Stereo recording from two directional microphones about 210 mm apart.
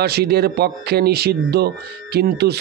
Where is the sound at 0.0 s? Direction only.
50° right (ahead or behind).